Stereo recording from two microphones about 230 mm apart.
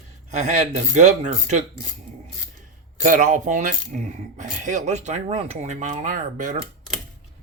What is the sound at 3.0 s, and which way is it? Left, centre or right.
Speech, right.